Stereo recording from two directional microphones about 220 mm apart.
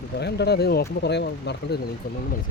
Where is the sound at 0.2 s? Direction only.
50° left (ahead or behind).